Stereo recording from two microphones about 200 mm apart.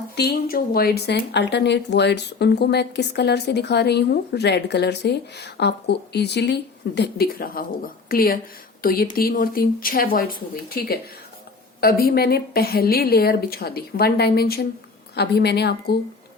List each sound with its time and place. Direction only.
0.2 s a woman's voice: 50° left (ahead or behind)